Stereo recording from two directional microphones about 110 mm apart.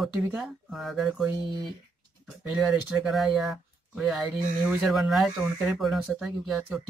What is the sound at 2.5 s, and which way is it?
Speech, 5° right (ahead or behind).